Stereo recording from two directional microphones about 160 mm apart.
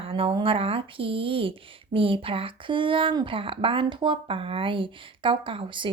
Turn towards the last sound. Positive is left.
turn(degrees=-30)  # may be behind; listen again after turning